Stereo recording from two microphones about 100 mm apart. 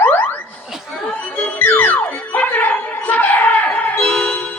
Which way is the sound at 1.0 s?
15° left (ahead or behind).